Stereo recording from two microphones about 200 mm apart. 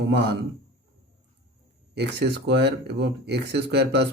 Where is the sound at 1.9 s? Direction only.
55° right (ahead or behind).